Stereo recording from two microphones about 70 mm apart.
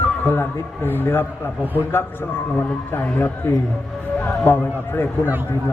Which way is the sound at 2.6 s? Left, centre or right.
Left.